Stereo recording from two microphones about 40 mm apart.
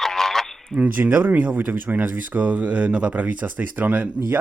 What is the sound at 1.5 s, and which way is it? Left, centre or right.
Speech, right.